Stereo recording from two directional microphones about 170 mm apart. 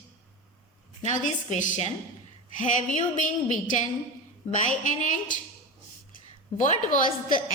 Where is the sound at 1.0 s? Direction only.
45° left (ahead or behind).